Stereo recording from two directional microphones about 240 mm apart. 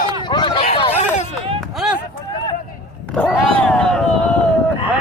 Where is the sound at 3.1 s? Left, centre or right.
Centre.